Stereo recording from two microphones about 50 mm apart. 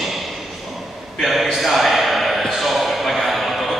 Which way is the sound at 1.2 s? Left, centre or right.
Centre.